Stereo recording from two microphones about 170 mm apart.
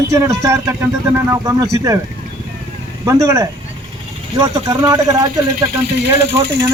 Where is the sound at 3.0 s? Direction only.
20° right (ahead or behind).